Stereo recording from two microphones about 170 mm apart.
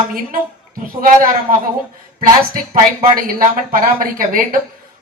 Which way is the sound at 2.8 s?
55° right (ahead or behind).